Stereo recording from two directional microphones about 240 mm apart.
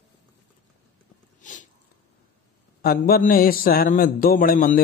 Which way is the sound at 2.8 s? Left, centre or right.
Left.